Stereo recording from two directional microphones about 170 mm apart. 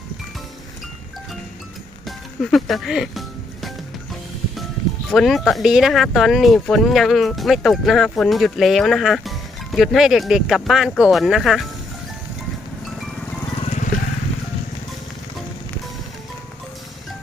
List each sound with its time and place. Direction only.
2.0 s music: centre (ahead or behind)
5.1 s speech: centre (ahead or behind)
13.6 s vehicle: 45° left (ahead or behind)